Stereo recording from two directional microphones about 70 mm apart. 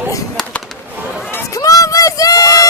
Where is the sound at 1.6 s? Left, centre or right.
Left.